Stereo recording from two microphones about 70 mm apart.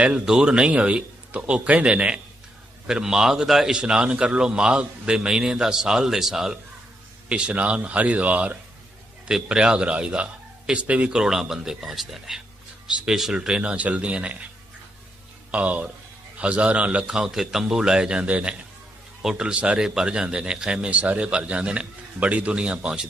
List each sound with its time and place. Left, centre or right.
0.0 s speech: centre
7.3 s speech: centre
15.5 s speech: centre